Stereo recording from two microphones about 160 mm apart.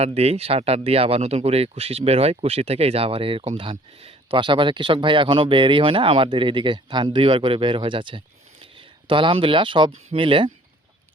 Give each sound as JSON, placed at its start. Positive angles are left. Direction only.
{"t": 0.0, "sound": "speech", "side_deg": -40}